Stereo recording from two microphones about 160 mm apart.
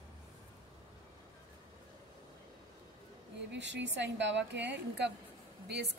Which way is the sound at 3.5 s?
90° right.